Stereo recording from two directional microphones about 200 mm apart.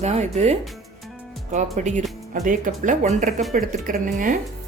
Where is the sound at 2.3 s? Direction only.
40° right (ahead or behind).